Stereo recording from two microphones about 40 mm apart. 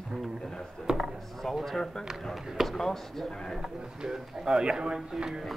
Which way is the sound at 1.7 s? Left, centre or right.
Centre.